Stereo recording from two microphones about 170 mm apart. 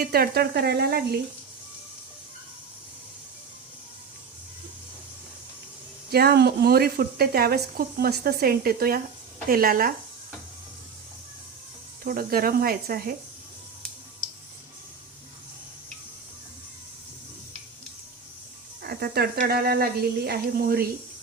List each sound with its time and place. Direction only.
0.0 s speech: 65° right (ahead or behind)
6.1 s speech: 65° right (ahead or behind)
12.0 s speech: 60° right (ahead or behind)
18.8 s speech: 65° right (ahead or behind)